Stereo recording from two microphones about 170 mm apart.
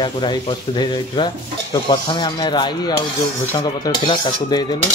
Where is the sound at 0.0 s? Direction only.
25° left (ahead or behind).